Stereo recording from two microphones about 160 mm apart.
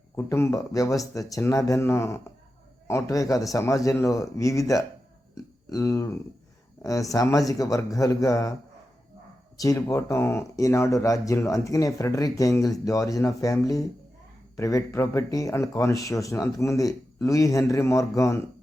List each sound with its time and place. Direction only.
0.2 s speech: 15° left (ahead or behind)
9.6 s speech: 20° left (ahead or behind)